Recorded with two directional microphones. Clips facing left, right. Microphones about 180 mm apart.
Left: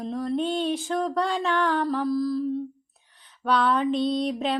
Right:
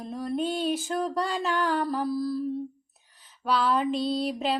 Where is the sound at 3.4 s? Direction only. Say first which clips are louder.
Left 2 dB; centre (ahead or behind).